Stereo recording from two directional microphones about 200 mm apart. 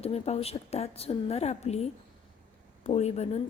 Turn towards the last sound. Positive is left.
turn(degrees=35)  # may be behind; listen again after turning